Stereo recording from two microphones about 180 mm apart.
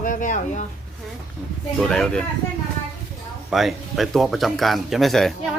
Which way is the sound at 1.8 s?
5° left (ahead or behind).